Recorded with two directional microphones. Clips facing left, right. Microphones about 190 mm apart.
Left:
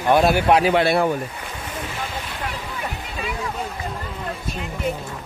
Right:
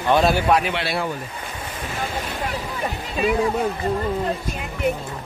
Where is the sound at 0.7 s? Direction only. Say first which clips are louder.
Left 7 dB; 50° left (ahead or behind).